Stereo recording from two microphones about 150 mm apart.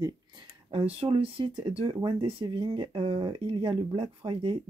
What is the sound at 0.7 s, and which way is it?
Speech, 40° right (ahead or behind).